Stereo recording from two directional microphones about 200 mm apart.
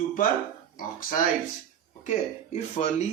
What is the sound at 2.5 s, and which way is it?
Speech, 35° left (ahead or behind).